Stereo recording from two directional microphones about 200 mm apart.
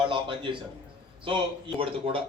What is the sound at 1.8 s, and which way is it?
Speech, 25° right (ahead or behind).